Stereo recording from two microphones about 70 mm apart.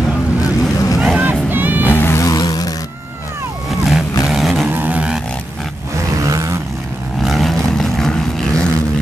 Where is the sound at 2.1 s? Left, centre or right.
Left.